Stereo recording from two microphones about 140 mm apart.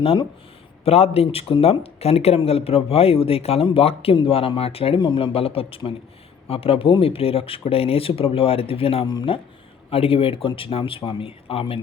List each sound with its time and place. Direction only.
0.0 s speech: 40° left (ahead or behind)